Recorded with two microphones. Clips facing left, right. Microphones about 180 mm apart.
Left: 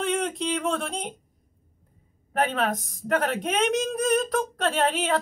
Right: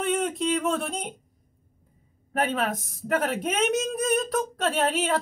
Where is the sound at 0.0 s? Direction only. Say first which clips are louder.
Right 1 dB; centre (ahead or behind).